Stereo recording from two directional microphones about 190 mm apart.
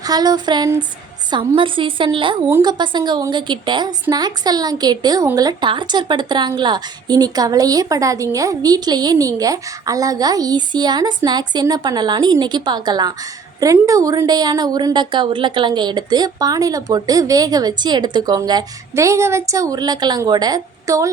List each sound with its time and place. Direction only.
0.0 s speech: 20° right (ahead or behind)